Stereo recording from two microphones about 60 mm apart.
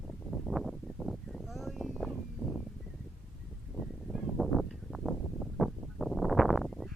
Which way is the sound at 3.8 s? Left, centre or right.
Centre.